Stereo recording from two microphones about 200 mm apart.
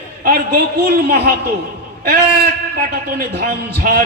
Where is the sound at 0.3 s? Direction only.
50° right (ahead or behind).